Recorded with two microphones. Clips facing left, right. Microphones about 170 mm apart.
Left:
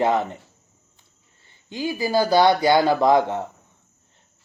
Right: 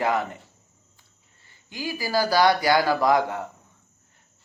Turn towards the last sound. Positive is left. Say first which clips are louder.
# left 4 dB
turn(degrees=25)  # may be behind; listen again after turning